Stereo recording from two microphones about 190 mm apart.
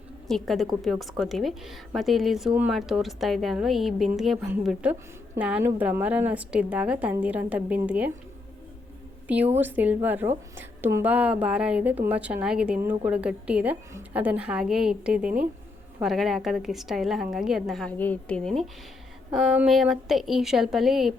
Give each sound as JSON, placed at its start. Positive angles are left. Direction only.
{"t": 0.3, "sound": "a woman's voice", "side_deg": 0}
{"t": 9.2, "sound": "a woman's voice", "side_deg": -10}